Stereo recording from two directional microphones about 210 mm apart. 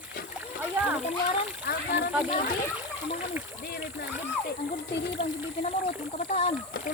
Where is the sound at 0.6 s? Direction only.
5° right (ahead or behind).